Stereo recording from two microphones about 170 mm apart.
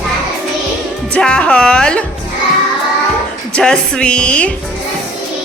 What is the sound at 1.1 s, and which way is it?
Speech, 5° left (ahead or behind).